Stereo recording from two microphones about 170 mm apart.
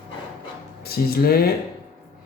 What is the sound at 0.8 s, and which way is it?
Speech, 65° left (ahead or behind).